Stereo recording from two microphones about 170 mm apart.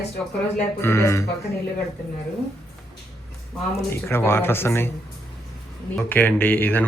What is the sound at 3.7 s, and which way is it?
Speech, 15° left (ahead or behind).